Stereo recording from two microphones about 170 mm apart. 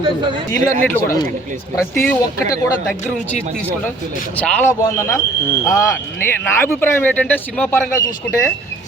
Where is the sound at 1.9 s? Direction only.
20° left (ahead or behind).